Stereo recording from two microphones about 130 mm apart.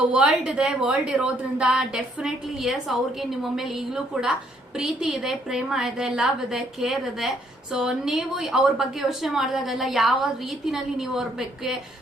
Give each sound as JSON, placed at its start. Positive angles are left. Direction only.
{"t": 0.1, "sound": "a woman's voice", "side_deg": -5}